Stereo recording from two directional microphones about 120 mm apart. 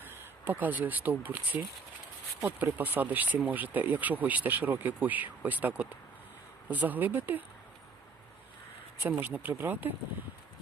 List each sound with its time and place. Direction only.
0.0 s speech: 15° right (ahead or behind)
9.0 s speech: 15° right (ahead or behind)